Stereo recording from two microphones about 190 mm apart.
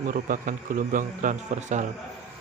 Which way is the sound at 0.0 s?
45° right (ahead or behind).